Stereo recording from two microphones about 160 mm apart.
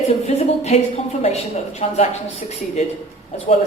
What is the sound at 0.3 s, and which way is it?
A woman's voice, 40° left (ahead or behind).